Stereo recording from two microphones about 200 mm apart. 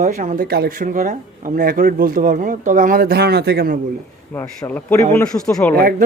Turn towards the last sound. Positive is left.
turn(degrees=5)  # may be behind; listen again after turning